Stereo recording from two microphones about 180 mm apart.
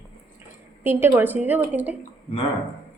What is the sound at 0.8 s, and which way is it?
A woman's voice, 10° right (ahead or behind).